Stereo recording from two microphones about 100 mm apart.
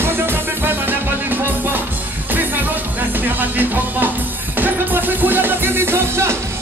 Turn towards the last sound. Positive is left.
turn(degrees=-25)  # may be behind; listen again after turning